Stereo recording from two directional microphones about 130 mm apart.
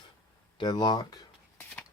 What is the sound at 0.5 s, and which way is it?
Speech, 35° left (ahead or behind).